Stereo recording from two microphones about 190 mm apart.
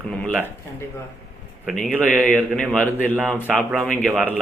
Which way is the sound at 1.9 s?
10° right (ahead or behind).